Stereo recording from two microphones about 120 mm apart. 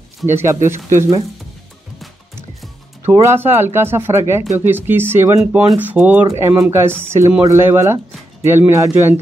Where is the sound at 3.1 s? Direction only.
25° right (ahead or behind).